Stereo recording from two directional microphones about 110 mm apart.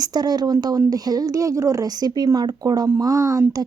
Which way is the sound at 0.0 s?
40° right (ahead or behind).